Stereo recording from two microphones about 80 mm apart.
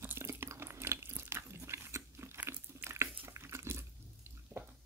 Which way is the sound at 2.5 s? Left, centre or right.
Right.